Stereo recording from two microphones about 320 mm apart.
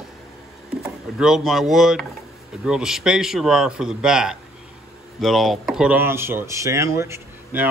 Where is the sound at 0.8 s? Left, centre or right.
Centre.